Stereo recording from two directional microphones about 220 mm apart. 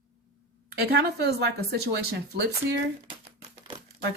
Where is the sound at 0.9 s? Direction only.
45° right (ahead or behind).